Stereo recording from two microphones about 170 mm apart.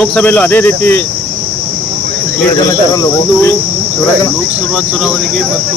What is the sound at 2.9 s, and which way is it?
Cricket, 20° left (ahead or behind).